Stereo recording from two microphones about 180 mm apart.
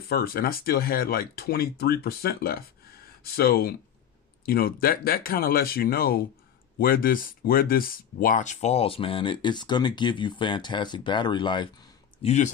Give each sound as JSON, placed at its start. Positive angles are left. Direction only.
{"t": 0.1, "sound": "speech", "side_deg": 60}
{"t": 12.2, "sound": "speech", "side_deg": 40}